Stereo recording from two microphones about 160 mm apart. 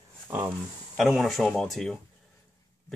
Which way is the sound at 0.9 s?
Centre (ahead or behind).